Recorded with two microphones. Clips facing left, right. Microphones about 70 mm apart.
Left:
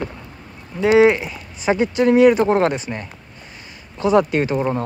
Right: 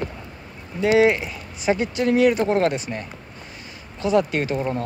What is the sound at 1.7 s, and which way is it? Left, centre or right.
Speech, left.